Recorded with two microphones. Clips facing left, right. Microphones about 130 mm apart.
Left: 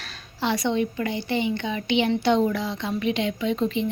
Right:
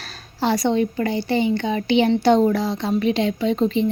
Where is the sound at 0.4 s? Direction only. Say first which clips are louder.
Right 4 dB; 35° right (ahead or behind).